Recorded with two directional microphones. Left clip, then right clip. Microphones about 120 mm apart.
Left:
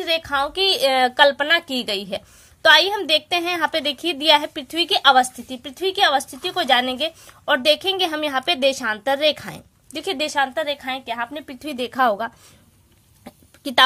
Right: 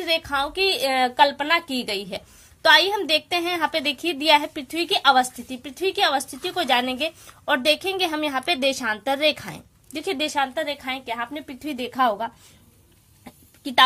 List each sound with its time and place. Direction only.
0.0 s speech: 25° left (ahead or behind)
0.6 s a woman's voice: 45° left (ahead or behind); by 11.5 s 25° left (ahead or behind)
11.6 s speech: 45° left (ahead or behind)
13.2 s chicken: 60° left (ahead or behind)